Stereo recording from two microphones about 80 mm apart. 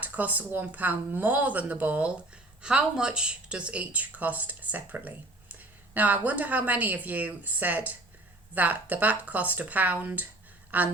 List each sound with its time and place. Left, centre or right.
0.0 s speech: right